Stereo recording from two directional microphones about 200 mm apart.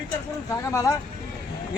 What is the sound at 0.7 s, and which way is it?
Speech, 15° left (ahead or behind).